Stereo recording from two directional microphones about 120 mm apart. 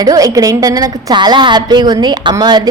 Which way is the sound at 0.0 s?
30° right (ahead or behind).